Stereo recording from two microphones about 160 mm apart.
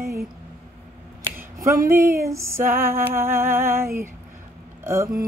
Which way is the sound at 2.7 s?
15° right (ahead or behind).